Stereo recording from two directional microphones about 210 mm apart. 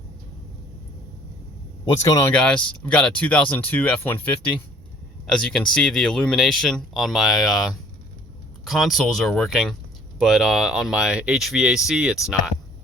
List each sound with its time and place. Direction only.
1.8 s speech: 15° left (ahead or behind)
2.3 s speech: 5° left (ahead or behind)